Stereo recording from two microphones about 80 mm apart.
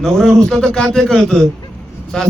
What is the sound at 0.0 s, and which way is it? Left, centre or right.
A man's voice, centre.